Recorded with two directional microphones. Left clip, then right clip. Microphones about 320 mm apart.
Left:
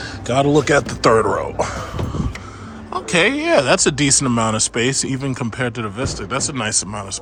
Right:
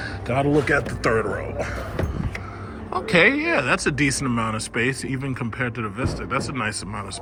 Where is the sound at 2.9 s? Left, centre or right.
Centre.